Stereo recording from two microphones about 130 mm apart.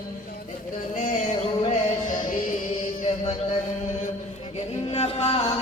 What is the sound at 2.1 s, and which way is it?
Music, 90° left.